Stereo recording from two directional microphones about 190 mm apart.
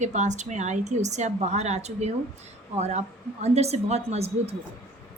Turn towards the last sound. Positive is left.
turn(degrees=-35)  # may be behind; listen again after turning